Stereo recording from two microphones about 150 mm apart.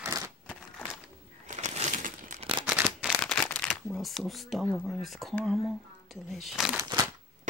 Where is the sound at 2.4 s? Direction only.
40° right (ahead or behind).